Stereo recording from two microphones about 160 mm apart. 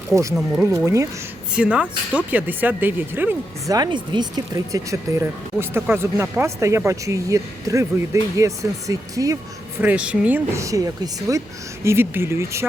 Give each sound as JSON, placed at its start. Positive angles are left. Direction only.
{"t": 0.1, "sound": "speech", "side_deg": -20}
{"t": 1.5, "sound": "speech", "side_deg": -10}
{"t": 3.8, "sound": "speech", "side_deg": -30}
{"t": 9.8, "sound": "speech", "side_deg": -10}